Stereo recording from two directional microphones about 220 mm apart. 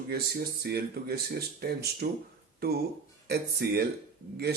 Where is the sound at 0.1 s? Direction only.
45° right (ahead or behind).